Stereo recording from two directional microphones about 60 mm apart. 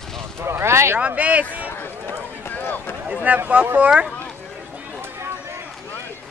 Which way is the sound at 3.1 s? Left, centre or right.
Centre.